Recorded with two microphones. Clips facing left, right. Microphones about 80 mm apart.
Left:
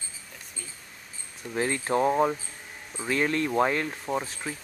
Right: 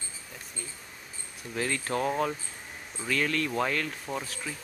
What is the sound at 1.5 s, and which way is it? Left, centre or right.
Speech, left.